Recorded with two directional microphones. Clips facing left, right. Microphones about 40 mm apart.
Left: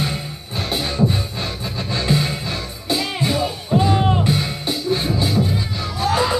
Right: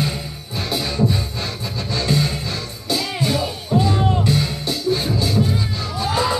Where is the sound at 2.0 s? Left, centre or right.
Left.